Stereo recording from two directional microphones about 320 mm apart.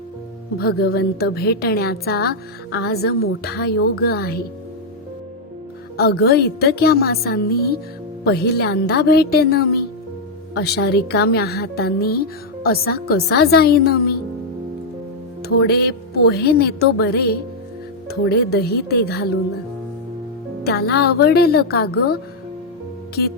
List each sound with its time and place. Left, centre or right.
0.6 s a woman's voice: left
6.0 s a woman's voice: left
15.4 s a woman's voice: left
20.7 s a woman's voice: left